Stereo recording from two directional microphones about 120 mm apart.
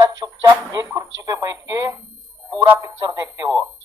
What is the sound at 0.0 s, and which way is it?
Speech, 30° right (ahead or behind).